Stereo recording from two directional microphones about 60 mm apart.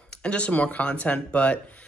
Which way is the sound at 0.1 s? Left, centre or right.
Centre.